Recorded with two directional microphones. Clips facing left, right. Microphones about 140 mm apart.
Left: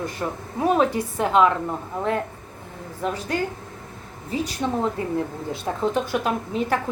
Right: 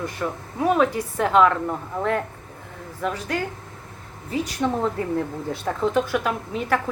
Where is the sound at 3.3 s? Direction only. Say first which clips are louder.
Left 2 dB; 30° left (ahead or behind).